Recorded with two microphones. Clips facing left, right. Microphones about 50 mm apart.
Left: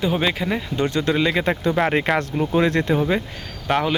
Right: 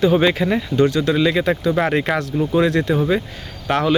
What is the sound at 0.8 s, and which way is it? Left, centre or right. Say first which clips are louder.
Speech: right 6 dB; left.